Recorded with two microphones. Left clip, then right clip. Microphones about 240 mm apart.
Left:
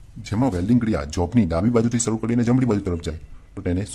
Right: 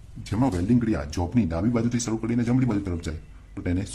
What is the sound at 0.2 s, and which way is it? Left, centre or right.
A man's voice, left.